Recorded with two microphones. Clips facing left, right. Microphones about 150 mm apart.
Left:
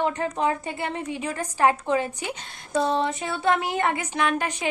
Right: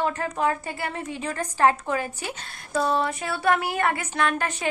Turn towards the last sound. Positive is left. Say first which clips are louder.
# even
turn(degrees=15)  # may be behind; listen again after turning